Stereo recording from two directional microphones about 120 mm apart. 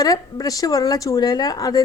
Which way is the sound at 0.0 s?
30° left (ahead or behind).